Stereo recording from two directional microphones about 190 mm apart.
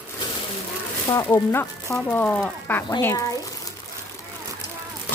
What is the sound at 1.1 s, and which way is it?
Speech, 15° left (ahead or behind).